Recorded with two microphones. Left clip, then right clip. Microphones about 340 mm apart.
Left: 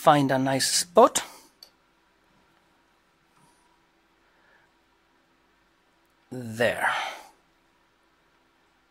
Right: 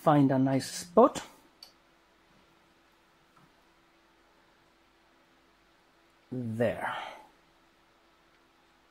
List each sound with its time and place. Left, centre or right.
0.0 s speech: left
6.3 s speech: left